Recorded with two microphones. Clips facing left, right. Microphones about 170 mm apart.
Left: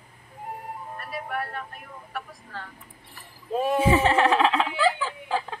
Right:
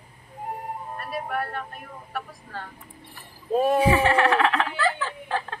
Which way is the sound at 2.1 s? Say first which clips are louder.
Right 2 dB; 45° right (ahead or behind).